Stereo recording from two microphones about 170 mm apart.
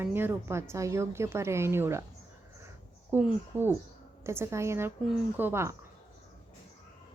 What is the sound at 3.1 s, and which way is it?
A woman's voice, 10° right (ahead or behind).